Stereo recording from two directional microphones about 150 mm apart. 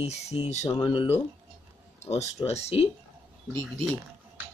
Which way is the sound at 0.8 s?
35° left (ahead or behind).